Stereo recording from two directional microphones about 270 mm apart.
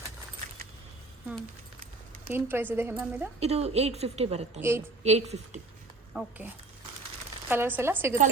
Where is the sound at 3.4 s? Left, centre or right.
Right.